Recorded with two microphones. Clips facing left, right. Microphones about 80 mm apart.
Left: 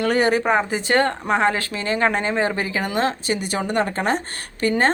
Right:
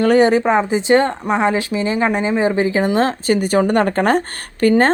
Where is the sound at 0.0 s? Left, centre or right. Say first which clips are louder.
Right 6 dB; right; by 2.6 s centre.